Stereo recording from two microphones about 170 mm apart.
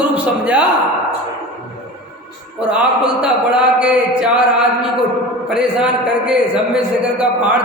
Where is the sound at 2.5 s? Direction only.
5° right (ahead or behind).